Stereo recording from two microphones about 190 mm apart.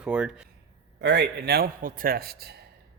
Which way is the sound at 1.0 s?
65° right (ahead or behind).